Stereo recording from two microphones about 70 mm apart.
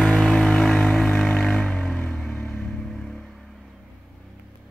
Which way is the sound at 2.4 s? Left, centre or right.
Centre.